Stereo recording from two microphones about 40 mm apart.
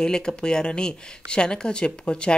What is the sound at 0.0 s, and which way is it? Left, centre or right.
Speech, centre.